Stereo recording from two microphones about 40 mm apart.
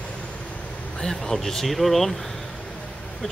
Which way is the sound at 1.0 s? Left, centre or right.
Centre.